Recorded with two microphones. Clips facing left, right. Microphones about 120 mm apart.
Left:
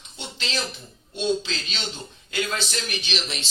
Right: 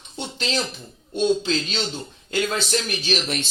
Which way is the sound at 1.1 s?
40° right (ahead or behind).